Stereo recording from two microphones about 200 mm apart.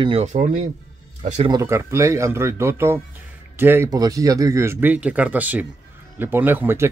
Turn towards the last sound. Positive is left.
turn(degrees=-10)  # may be behind; listen again after turning